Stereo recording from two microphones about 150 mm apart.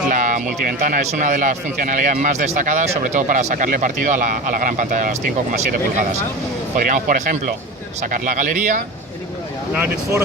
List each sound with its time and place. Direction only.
0.1 s speech: 60° right (ahead or behind)
6.7 s speech: 60° right (ahead or behind)
9.7 s speech: 15° right (ahead or behind)